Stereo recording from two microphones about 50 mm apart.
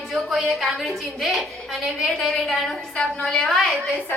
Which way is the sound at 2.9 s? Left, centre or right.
Centre.